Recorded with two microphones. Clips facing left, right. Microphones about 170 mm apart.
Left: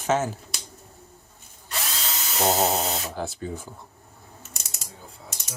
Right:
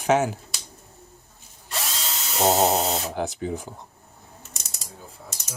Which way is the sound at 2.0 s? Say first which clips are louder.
Right 2 dB; centre (ahead or behind).